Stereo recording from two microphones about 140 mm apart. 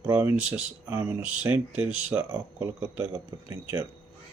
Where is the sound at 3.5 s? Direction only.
20° right (ahead or behind).